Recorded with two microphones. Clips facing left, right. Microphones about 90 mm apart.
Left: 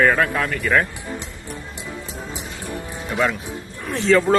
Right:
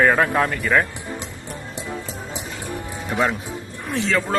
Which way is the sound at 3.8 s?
Centre (ahead or behind).